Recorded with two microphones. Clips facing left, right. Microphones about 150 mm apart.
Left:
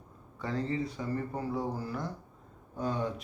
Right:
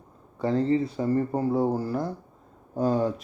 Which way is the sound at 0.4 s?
30° right (ahead or behind).